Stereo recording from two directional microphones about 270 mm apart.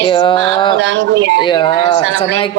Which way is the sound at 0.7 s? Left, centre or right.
Right.